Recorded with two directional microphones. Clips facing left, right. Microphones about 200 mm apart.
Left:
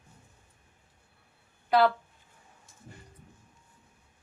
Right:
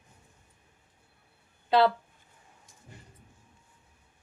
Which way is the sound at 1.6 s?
25° right (ahead or behind).